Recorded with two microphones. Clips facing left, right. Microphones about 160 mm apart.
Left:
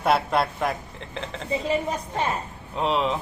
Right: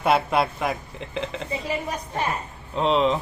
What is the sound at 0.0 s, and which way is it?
Speech, centre (ahead or behind).